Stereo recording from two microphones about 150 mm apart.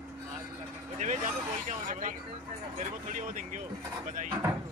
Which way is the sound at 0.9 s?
55° right (ahead or behind).